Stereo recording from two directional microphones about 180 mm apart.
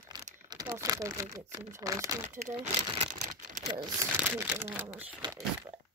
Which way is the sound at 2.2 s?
45° right (ahead or behind).